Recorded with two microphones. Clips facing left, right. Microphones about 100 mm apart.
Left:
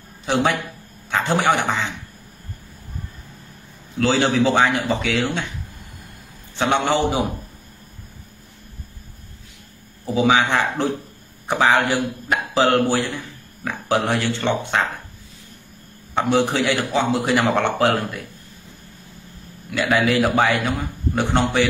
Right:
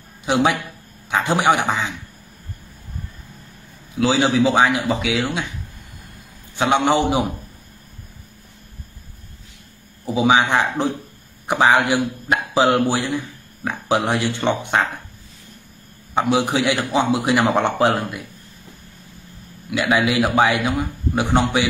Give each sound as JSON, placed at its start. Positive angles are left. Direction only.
{"t": 0.2, "sound": "a man's voice", "side_deg": -15}
{"t": 4.0, "sound": "a man's voice", "side_deg": -10}
{"t": 6.5, "sound": "a man's voice", "side_deg": -15}
{"t": 10.0, "sound": "a man's voice", "side_deg": -15}
{"t": 16.2, "sound": "a man's voice", "side_deg": -10}
{"t": 19.7, "sound": "a man's voice", "side_deg": -15}